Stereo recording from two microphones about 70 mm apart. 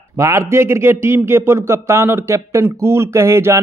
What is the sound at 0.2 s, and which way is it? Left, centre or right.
Speech, right.